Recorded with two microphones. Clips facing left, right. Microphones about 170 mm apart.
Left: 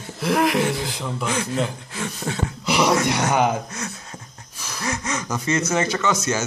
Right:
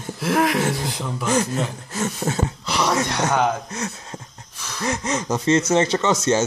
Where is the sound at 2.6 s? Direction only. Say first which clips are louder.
Left 4 dB; 15° left (ahead or behind).